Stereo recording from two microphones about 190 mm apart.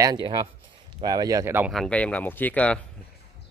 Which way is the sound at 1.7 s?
5° left (ahead or behind).